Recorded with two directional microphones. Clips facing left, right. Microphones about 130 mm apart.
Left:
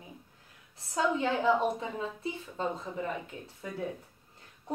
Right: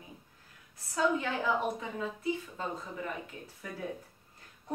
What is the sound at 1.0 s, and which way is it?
Speech, 25° left (ahead or behind).